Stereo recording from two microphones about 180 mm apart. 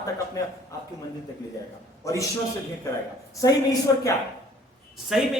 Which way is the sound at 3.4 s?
20° left (ahead or behind).